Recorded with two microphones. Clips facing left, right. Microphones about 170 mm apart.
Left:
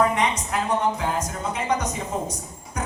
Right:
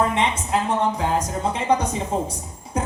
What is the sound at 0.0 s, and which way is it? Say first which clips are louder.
A woman's voice: even; 25° right (ahead or behind).